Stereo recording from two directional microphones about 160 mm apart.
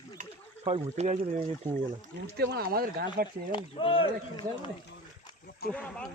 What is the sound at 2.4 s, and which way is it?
Speech, 80° right.